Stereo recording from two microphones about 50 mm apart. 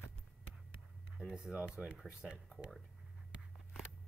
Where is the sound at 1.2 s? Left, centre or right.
Centre.